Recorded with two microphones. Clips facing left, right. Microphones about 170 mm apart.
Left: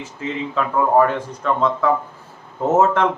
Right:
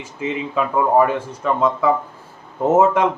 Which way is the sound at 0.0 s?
10° right (ahead or behind).